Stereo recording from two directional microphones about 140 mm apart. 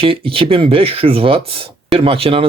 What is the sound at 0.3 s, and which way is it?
Speech, 40° right (ahead or behind).